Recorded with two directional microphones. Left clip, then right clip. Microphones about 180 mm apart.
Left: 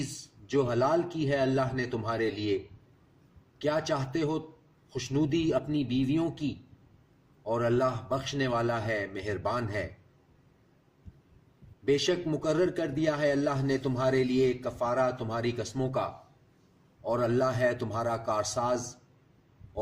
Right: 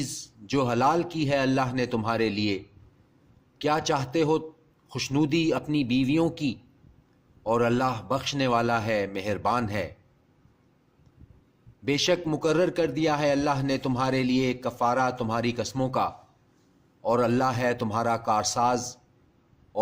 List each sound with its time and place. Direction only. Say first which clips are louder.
0.0 s a man's voice: right 4 dB; 50° right (ahead or behind)
3.6 s a man's voice: right 4 dB; 50° right (ahead or behind)
11.9 s a man's voice: right 3 dB; 50° right (ahead or behind)